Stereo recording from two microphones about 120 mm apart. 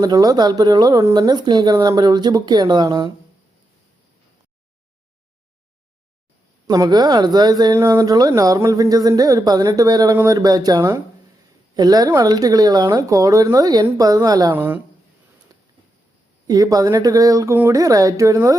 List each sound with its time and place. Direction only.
0.0 s speech: 35° right (ahead or behind)
6.7 s speech: 30° right (ahead or behind)
14.5 s speech: 15° right (ahead or behind)
15.5 s a sound: 30° right (ahead or behind)
16.5 s speech: 30° right (ahead or behind)